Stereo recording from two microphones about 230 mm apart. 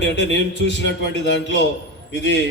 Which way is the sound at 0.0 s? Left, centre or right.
Left.